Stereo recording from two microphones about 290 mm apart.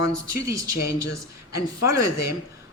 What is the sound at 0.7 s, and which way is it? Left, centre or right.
Speech, left.